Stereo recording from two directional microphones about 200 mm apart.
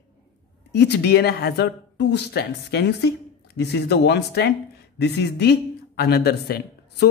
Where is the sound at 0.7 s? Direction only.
55° left (ahead or behind).